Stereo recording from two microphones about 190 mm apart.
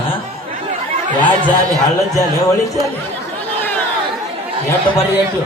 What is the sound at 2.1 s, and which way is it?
Speech, 15° left (ahead or behind).